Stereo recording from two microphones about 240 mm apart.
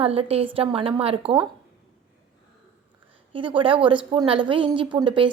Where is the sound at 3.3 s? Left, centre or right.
Right.